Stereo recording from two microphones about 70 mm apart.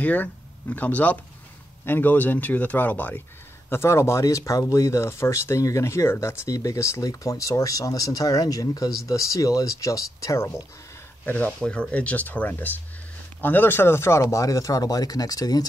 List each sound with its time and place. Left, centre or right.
0.0 s speech: left
3.7 s speech: left
11.2 s speech: left